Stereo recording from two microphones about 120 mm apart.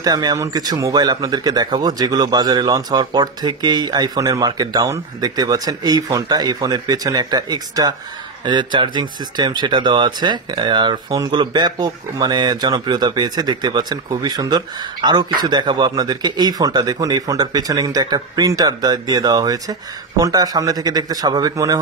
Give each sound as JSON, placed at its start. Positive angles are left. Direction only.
{"t": 0.0, "sound": "speech", "side_deg": -30}